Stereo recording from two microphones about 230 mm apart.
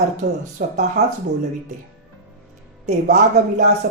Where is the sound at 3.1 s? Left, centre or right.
Right.